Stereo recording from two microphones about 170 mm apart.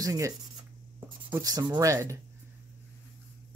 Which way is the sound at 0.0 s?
20° right (ahead or behind).